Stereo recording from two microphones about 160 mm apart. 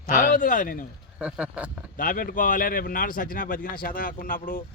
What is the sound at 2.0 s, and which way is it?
Speech, 60° left (ahead or behind).